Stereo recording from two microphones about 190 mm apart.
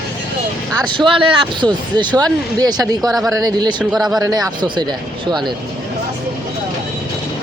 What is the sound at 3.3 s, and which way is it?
Speech, 20° right (ahead or behind).